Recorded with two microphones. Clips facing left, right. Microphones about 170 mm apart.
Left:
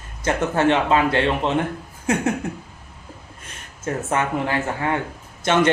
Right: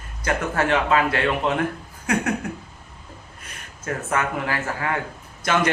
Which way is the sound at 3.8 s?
25° left (ahead or behind).